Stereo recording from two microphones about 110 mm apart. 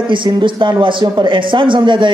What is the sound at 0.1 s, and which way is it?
A man's voice, 45° right (ahead or behind).